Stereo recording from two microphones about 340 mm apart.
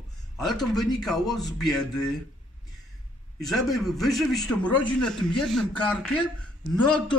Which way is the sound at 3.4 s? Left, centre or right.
Centre.